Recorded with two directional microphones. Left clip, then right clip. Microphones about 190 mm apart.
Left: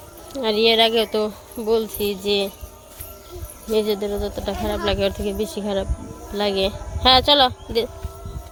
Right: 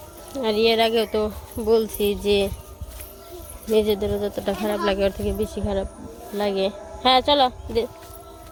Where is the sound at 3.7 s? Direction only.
10° right (ahead or behind).